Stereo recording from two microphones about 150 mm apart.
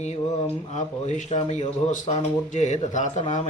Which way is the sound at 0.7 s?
50° left (ahead or behind).